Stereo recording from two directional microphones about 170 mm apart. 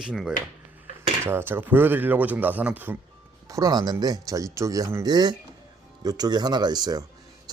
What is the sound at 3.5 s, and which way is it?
Speech, 20° right (ahead or behind).